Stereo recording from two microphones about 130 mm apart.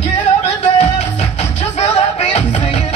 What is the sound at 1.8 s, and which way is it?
Music, 55° left (ahead or behind).